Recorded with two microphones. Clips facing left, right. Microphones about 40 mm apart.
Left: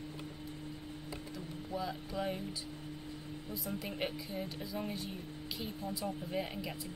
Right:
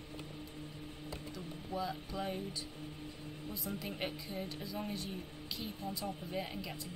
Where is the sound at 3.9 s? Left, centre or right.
Centre.